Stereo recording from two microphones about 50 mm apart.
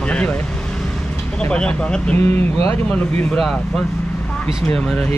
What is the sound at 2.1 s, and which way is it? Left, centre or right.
Speech, left.